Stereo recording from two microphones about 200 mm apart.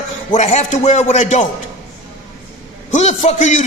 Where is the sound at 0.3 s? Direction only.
35° left (ahead or behind).